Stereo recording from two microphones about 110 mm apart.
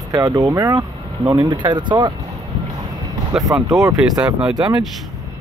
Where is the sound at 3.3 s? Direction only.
5° right (ahead or behind).